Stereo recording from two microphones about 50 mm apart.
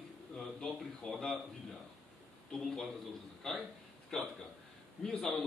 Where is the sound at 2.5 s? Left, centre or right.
Centre.